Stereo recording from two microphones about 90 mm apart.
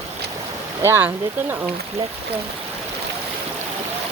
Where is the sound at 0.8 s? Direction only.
30° right (ahead or behind).